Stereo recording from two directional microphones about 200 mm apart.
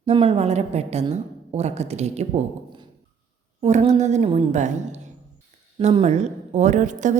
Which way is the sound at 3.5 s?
30° right (ahead or behind).